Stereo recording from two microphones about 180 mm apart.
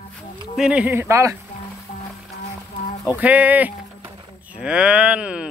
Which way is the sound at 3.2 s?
10° right (ahead or behind).